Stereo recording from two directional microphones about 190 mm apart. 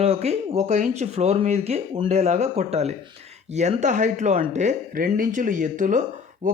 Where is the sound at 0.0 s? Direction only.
35° right (ahead or behind).